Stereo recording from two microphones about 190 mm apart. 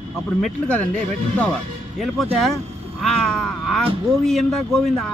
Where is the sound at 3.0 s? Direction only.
Centre (ahead or behind).